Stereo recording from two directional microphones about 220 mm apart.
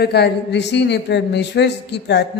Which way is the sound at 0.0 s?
50° left (ahead or behind).